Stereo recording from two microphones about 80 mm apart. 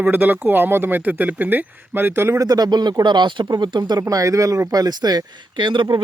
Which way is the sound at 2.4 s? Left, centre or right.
Right.